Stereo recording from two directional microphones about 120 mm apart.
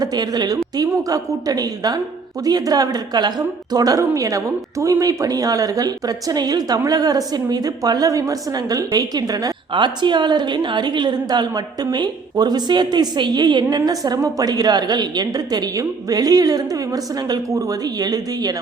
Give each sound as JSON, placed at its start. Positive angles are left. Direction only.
{"t": 0.0, "sound": "a woman's voice", "side_deg": -35}